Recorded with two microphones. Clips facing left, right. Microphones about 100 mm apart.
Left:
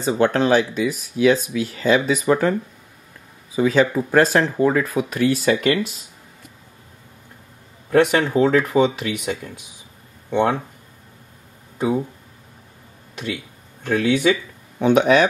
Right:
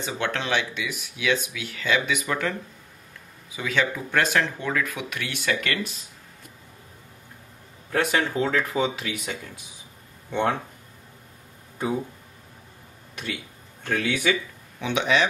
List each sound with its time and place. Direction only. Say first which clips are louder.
0.0 s speech: left 10 dB; 40° left (ahead or behind)
3.5 s speech: left 9 dB; 35° left (ahead or behind)
7.9 s speech: left 8 dB; 25° left (ahead or behind)
9.1 s speech: left 7 dB; 20° left (ahead or behind)
13.1 s speech: left 5 dB; 20° left (ahead or behind)
14.8 s speech: left 8 dB; 45° left (ahead or behind)